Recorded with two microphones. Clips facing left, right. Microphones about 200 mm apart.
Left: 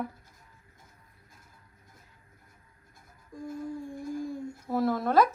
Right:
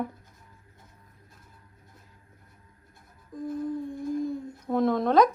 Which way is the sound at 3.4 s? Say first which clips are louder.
Right 5 dB; centre (ahead or behind).